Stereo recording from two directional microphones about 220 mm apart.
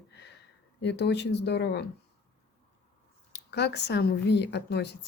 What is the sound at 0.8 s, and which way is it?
A woman's voice, 50° left (ahead or behind).